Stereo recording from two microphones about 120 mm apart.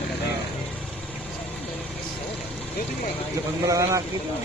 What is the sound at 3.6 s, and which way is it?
Speech, 30° right (ahead or behind).